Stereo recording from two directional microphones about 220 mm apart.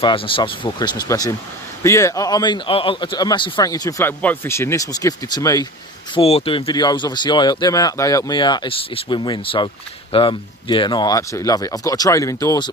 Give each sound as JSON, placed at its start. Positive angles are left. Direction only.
{"t": 0.0, "sound": "speech", "side_deg": 20}